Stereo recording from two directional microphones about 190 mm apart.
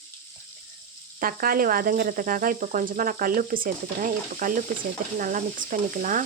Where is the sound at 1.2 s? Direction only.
50° right (ahead or behind).